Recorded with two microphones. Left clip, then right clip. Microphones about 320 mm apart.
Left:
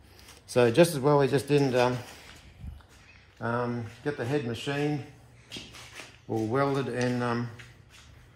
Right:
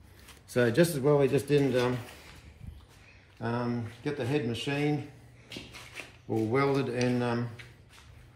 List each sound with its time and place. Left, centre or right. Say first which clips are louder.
0.5 s speech: left 4 dB; centre
3.3 s speech: left 3 dB; centre